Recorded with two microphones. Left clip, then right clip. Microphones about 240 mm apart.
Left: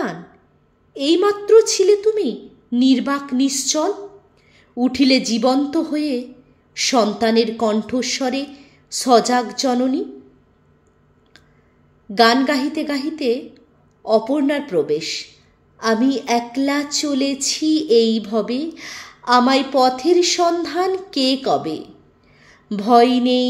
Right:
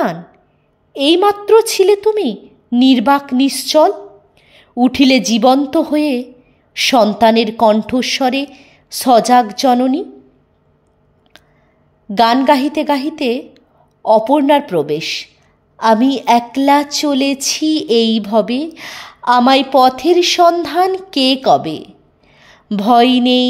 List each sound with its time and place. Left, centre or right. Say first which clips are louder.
0.9 s a woman's voice: right 5 dB; right
12.1 s a woman's voice: right 4 dB; right